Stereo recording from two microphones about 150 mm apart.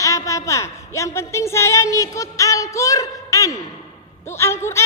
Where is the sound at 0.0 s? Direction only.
20° left (ahead or behind).